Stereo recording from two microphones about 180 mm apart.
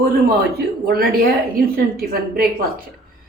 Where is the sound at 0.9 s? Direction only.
55° right (ahead or behind).